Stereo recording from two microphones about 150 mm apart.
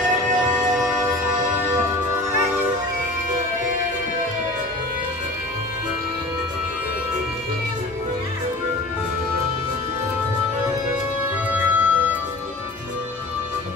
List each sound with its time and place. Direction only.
2.3 s music: 15° right (ahead or behind)
11.5 s music: 10° right (ahead or behind)